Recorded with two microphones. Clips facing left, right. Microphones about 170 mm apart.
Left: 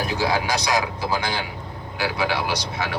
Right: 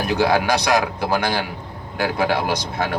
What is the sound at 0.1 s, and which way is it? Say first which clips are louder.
Speech: right 8 dB; 60° right (ahead or behind).